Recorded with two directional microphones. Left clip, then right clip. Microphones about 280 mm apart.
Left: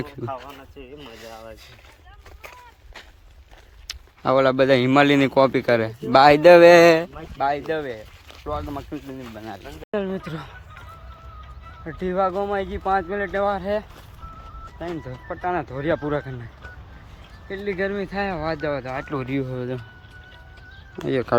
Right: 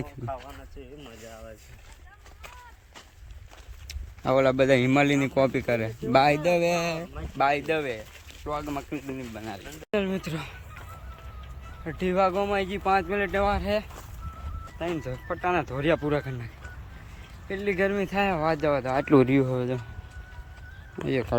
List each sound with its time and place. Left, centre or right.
0.9 s speech: centre
2.4 s a sound: centre
3.8 s speech: centre
7.3 s speech: centre
11.9 s speech: centre
17.5 s speech: centre
18.9 s speech: right
19.3 s speech: centre
21.1 s speech: centre